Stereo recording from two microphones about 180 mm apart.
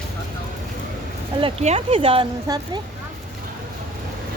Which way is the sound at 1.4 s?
30° right (ahead or behind).